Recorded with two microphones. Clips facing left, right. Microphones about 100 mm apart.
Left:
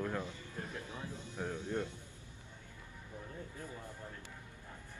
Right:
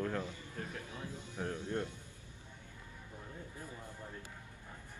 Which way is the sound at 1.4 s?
15° left (ahead or behind).